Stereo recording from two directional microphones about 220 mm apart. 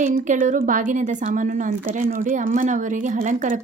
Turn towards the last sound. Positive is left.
turn(degrees=-35)  # may be behind; listen again after turning